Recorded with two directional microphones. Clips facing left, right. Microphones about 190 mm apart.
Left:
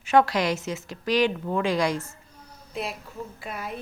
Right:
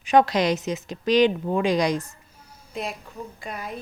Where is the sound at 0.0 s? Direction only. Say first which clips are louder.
Right 2 dB; 15° right (ahead or behind).